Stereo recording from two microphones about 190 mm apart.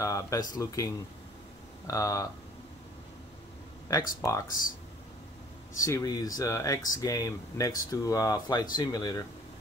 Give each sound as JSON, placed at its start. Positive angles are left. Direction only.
{"t": 0.0, "sound": "speech", "side_deg": 15}
{"t": 4.2, "sound": "speech", "side_deg": 15}
{"t": 5.8, "sound": "speech", "side_deg": 15}